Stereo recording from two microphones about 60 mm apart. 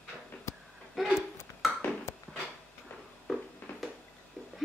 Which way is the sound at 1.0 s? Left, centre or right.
Centre.